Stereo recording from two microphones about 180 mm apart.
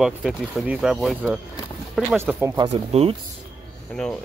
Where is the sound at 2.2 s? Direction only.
10° right (ahead or behind).